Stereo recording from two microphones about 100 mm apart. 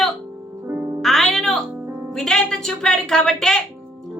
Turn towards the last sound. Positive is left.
turn(degrees=5)  # may be behind; listen again after turning